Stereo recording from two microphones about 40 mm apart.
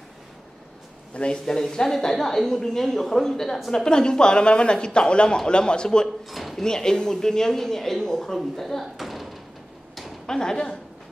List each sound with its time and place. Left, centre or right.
1.1 s speech: left
1.4 s a woman's voice: centre
6.3 s dishes: centre
6.6 s a woman's voice: centre
8.8 s slam: centre
10.2 s a woman's voice: centre